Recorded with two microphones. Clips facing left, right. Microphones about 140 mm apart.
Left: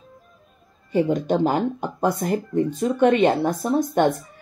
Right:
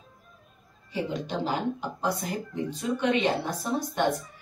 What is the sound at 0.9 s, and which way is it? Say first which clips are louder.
Speech: left 10 dB; 50° left (ahead or behind).